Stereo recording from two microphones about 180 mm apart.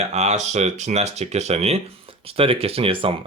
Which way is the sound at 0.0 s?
40° right (ahead or behind).